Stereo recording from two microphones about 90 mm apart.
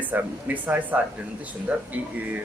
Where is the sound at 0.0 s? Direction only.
20° right (ahead or behind).